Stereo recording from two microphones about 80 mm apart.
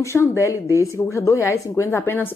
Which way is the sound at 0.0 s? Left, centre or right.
Left.